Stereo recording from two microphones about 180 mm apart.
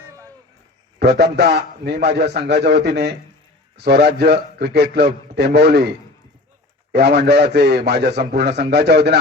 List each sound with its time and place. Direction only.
0.9 s a man's voice: 65° right (ahead or behind)
6.9 s a man's voice: 70° right (ahead or behind)